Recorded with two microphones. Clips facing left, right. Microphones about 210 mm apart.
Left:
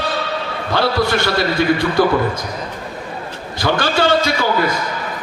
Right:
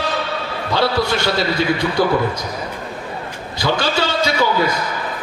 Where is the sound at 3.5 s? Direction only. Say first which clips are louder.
Left 2 dB; 55° left (ahead or behind).